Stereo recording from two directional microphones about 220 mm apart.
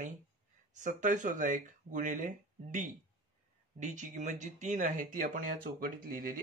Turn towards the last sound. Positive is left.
turn(degrees=-40)  # may be behind; listen again after turning